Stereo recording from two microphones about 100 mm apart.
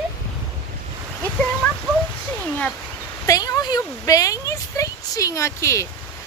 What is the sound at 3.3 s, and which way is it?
Speech, 35° left (ahead or behind).